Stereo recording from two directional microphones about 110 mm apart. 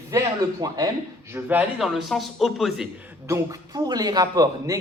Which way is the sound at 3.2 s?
30° right (ahead or behind).